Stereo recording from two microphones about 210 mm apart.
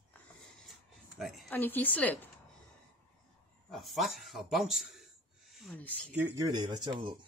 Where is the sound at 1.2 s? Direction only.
Centre (ahead or behind).